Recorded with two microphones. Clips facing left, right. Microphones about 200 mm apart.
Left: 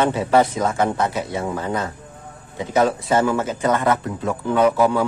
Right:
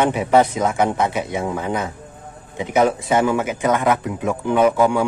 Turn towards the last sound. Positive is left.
turn(degrees=-15)  # may be behind; listen again after turning